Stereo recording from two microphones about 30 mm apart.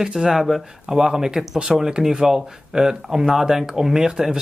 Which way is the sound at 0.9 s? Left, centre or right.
Right.